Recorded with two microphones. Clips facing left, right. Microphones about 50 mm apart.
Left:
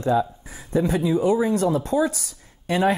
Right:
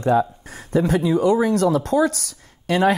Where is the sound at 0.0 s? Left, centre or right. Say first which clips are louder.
Right 3 dB; right.